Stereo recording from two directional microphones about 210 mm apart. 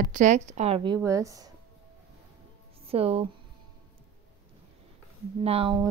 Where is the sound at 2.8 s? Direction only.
30° right (ahead or behind).